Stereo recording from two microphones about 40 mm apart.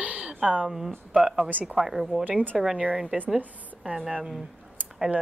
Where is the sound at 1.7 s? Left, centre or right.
Centre.